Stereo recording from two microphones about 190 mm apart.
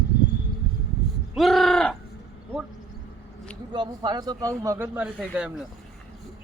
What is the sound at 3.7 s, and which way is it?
A man's voice, 20° right (ahead or behind).